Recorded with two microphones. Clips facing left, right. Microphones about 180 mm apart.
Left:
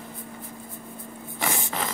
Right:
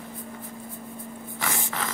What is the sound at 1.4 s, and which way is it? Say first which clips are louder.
Snort: left 3 dB; 20° left (ahead or behind).